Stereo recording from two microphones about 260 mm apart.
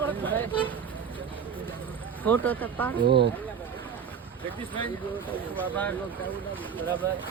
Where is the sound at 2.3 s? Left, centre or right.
Centre.